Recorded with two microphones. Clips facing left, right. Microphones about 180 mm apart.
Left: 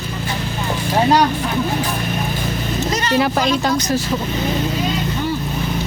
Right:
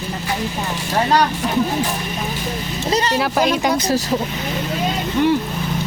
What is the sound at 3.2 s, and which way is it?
Speech, 5° right (ahead or behind).